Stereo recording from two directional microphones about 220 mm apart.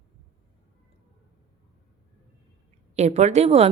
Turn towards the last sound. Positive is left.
turn(degrees=-30)  # may be behind; listen again after turning